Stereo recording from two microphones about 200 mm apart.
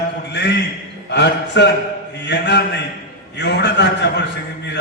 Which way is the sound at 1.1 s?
60° left (ahead or behind).